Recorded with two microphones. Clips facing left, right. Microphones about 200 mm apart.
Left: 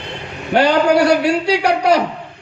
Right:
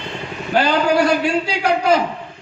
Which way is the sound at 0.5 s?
70° left (ahead or behind).